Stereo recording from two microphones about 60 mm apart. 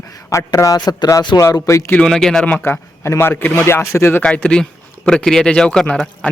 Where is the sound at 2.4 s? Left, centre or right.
Left.